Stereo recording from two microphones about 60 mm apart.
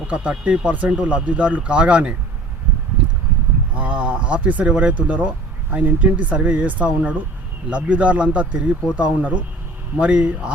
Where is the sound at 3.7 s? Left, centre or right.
Right.